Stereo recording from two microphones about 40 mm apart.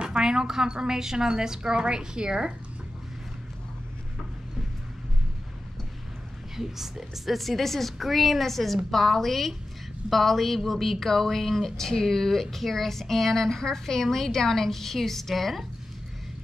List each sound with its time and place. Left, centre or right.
0.0 s a woman's voice: right
6.5 s speech: centre